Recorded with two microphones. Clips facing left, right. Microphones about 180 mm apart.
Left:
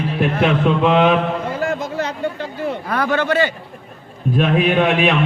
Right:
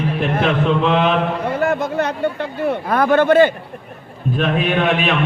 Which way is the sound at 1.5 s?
60° right (ahead or behind).